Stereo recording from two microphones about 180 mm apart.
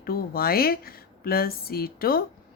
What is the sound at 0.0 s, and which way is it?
A woman's voice, 55° left (ahead or behind).